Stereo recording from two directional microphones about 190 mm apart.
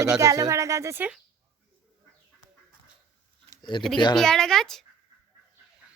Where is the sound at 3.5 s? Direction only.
20° left (ahead or behind).